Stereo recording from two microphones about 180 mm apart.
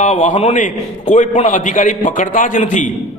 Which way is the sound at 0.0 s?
40° left (ahead or behind).